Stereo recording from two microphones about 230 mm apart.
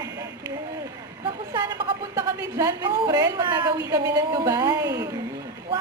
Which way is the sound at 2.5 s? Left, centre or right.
Centre.